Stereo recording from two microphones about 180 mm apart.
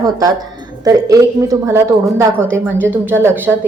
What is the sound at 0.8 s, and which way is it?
A woman's voice, 20° right (ahead or behind).